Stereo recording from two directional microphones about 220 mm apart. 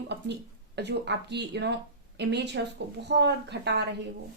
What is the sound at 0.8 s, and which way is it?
A woman's voice, 50° right (ahead or behind).